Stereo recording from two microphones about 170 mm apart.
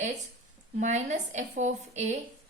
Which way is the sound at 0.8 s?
45° right (ahead or behind).